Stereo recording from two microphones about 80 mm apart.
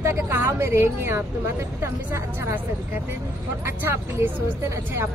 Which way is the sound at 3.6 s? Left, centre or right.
Right.